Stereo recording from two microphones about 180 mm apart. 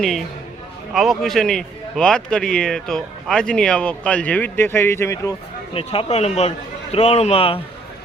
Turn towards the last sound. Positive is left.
turn(degrees=30)  # may be behind; listen again after turning